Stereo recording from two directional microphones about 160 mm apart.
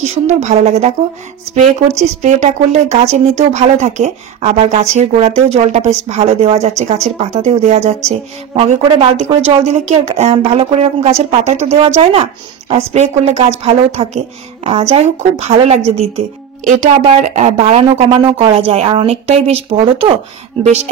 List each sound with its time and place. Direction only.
0.0 s speech: 45° right (ahead or behind)
2.0 s speech: 45° right (ahead or behind)